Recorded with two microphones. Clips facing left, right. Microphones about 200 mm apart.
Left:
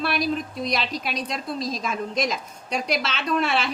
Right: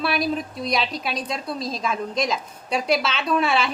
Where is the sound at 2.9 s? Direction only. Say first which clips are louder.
Right 4 dB; centre (ahead or behind).